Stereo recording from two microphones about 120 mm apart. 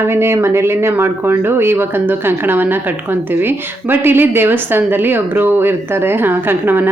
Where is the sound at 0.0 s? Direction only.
20° right (ahead or behind).